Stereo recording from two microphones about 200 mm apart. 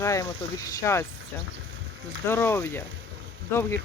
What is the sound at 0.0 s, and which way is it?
Speech, 15° left (ahead or behind).